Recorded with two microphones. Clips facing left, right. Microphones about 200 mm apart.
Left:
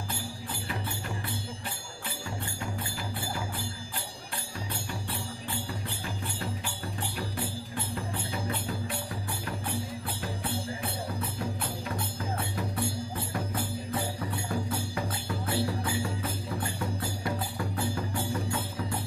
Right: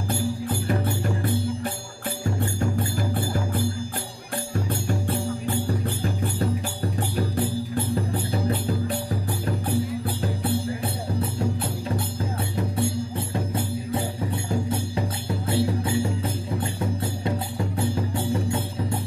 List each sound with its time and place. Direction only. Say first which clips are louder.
0.1 s music: right 12 dB; 45° right (ahead or behind)
4.6 s music: right 9 dB; 45° right (ahead or behind)
13.3 s music: right 5 dB; 25° right (ahead or behind)